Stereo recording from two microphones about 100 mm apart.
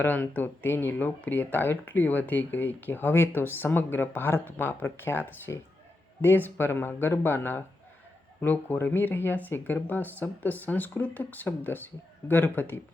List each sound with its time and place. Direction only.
0.0 s speech: 15° left (ahead or behind)